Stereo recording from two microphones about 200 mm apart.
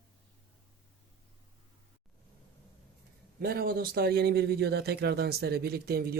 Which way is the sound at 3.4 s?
50° right (ahead or behind).